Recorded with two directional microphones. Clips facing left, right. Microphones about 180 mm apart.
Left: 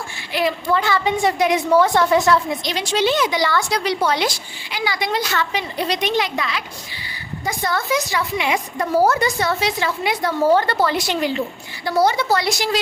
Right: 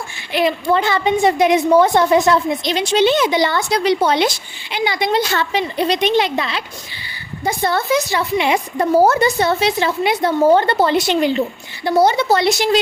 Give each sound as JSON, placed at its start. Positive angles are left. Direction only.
{"t": 0.3, "sound": "a woman's voice", "side_deg": -25}